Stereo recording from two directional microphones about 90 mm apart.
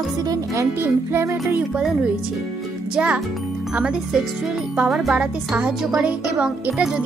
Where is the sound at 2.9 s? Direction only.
15° right (ahead or behind).